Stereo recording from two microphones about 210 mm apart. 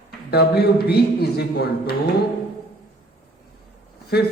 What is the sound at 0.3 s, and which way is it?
Speech, 50° left (ahead or behind).